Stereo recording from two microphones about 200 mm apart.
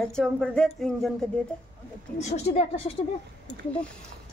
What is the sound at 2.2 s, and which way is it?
Speech, 35° left (ahead or behind).